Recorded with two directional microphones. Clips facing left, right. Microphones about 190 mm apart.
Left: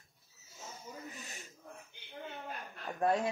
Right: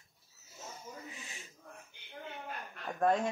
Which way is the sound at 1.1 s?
40° left (ahead or behind).